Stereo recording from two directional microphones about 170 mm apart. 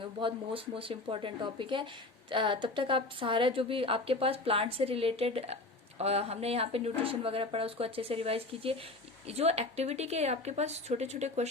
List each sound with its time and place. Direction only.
0.0 s a woman's voice: 30° right (ahead or behind)